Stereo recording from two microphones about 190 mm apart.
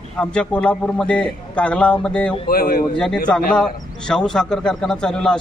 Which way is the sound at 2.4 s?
50° left (ahead or behind).